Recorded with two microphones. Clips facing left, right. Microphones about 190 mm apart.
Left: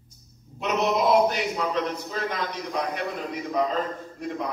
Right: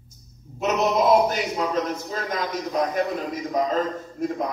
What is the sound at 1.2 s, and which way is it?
A man's voice, 45° right (ahead or behind).